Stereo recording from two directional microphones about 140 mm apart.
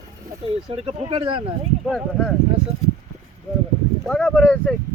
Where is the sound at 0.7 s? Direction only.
40° right (ahead or behind).